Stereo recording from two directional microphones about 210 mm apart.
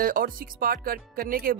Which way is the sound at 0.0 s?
40° right (ahead or behind).